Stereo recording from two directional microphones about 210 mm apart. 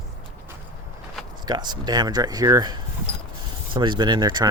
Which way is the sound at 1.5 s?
20° right (ahead or behind).